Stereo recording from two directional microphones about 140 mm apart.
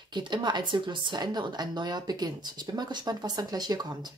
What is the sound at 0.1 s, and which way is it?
Speech, 30° right (ahead or behind).